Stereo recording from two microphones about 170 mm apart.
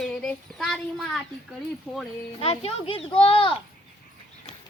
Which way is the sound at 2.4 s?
35° left (ahead or behind).